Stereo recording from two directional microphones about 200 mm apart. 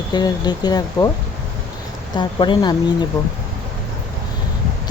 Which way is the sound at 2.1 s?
20° left (ahead or behind).